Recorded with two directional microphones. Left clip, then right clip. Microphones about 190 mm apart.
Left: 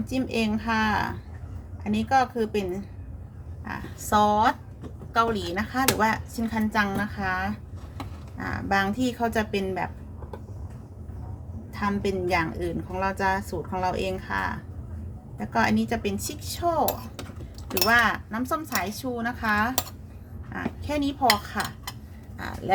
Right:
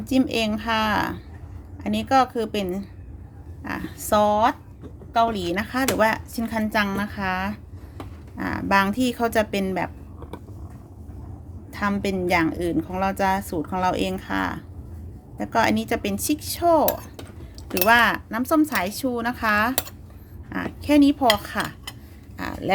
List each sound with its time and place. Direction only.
0.1 s a woman's voice: 60° right (ahead or behind)
11.7 s a woman's voice: 60° right (ahead or behind)
17.8 s speech: 45° right (ahead or behind)